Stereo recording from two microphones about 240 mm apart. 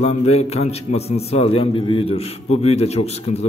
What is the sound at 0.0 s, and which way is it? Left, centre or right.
A man's voice, left.